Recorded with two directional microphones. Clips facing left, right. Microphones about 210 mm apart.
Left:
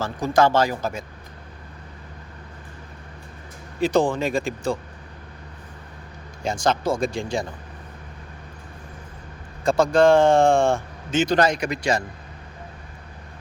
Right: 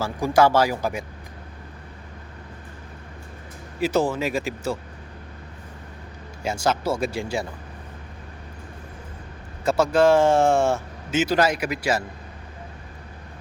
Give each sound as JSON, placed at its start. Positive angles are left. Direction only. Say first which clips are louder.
{"t": 0.0, "sound": "speech", "louder": "right 1 dB", "side_deg": -10}
{"t": 3.8, "sound": "speech", "louder": "left 2 dB", "side_deg": -5}
{"t": 6.4, "sound": "speech", "louder": "left 1 dB", "side_deg": -5}
{"t": 9.6, "sound": "speech", "louder": "left 1 dB", "side_deg": -5}